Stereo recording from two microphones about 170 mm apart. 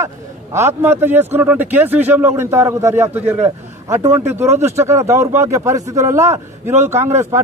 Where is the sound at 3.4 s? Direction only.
40° right (ahead or behind).